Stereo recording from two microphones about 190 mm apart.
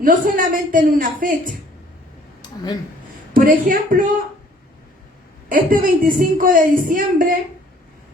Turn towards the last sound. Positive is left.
turn(degrees=-45)  # may be behind; listen again after turning